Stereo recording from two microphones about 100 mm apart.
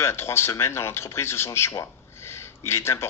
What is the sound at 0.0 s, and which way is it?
A man's voice, 25° left (ahead or behind).